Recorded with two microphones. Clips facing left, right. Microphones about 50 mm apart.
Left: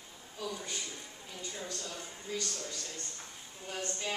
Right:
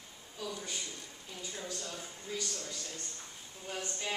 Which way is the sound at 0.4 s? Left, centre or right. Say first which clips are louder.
Left 1 dB; centre.